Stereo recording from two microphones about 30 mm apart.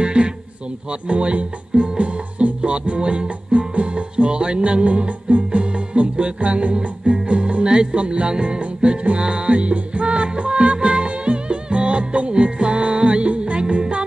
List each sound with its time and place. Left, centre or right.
0.0 s a sound: right
0.8 s speech: right
7.1 s music: right
9.5 s music: right